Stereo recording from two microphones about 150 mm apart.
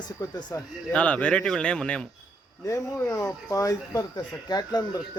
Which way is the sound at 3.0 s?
20° left (ahead or behind).